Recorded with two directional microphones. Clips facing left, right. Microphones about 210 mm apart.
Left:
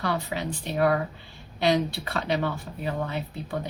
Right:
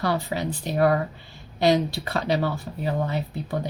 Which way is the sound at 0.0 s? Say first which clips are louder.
Right 3 dB; 40° right (ahead or behind).